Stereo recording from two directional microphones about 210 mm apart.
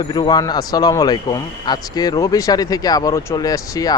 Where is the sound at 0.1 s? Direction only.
20° left (ahead or behind).